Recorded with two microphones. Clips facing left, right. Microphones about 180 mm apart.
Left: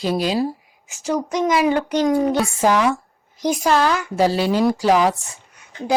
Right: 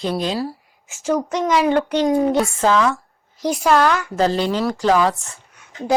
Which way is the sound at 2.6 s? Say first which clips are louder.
Even; 15° left (ahead or behind).